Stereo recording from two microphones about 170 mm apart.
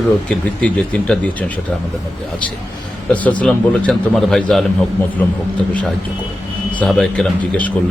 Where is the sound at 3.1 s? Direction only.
10° left (ahead or behind).